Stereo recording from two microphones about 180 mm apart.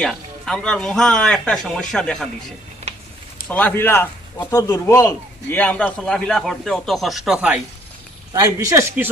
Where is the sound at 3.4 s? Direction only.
10° left (ahead or behind).